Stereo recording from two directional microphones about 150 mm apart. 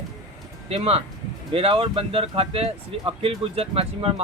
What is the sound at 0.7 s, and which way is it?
Speech, 40° right (ahead or behind).